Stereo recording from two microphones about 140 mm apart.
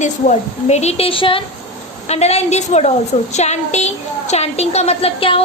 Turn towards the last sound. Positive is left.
turn(degrees=40)  # may be behind; listen again after turning